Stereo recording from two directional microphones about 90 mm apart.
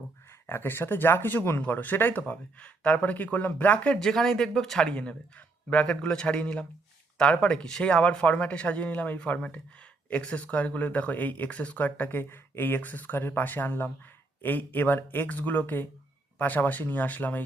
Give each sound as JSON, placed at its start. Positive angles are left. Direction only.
{"t": 0.3, "sound": "speech", "side_deg": 25}
{"t": 4.0, "sound": "a man's voice", "side_deg": 5}